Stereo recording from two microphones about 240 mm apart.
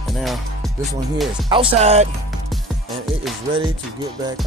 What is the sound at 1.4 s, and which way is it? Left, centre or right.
Speech, right.